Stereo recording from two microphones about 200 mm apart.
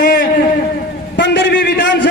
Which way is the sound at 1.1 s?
55° left (ahead or behind).